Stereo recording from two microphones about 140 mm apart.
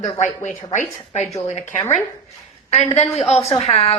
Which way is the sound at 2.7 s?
50° left (ahead or behind).